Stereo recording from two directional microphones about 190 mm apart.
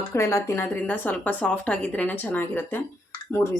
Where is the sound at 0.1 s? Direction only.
15° left (ahead or behind).